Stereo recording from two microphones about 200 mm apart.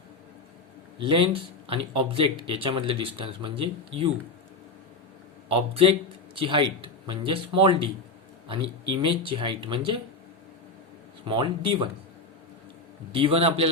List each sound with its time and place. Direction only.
0.9 s speech: 25° right (ahead or behind)
5.5 s speech: 30° right (ahead or behind)
11.3 s speech: 25° right (ahead or behind)
13.1 s speech: 30° right (ahead or behind)